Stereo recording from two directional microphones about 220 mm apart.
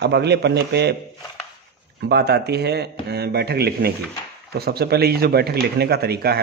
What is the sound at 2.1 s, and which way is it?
A man's voice, 50° right (ahead or behind).